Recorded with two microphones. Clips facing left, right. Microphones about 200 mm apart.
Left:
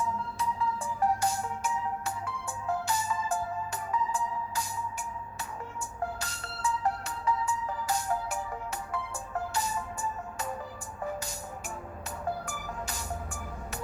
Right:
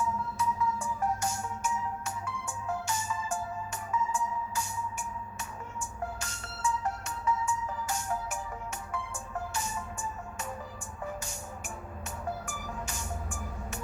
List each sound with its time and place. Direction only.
0.0 s music: 30° left (ahead or behind)
9.6 s music: 35° left (ahead or behind)
12.5 s music: 35° left (ahead or behind)